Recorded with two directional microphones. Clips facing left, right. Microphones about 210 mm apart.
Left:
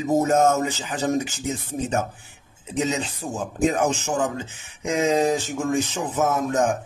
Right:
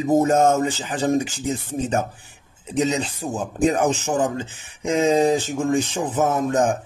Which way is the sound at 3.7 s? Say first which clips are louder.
Right 2 dB; 35° right (ahead or behind).